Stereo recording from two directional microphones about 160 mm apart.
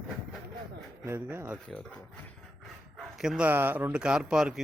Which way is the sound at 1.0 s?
15° right (ahead or behind).